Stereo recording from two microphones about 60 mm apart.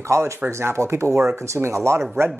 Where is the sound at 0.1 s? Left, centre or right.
Right.